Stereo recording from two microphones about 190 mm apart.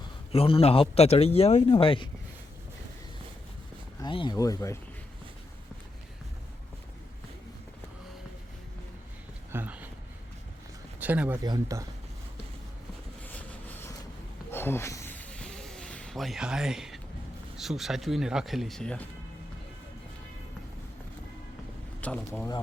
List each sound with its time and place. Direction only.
0.3 s a man's voice: 30° left (ahead or behind)
4.0 s speech: 25° left (ahead or behind)
9.5 s a sound: 10° right (ahead or behind)
11.0 s speech: 10° right (ahead or behind)
13.2 s vehicle: 10° left (ahead or behind)
14.5 s a sound: 10° left (ahead or behind)
17.6 s speech: centre (ahead or behind)
22.0 s speech: 10° left (ahead or behind)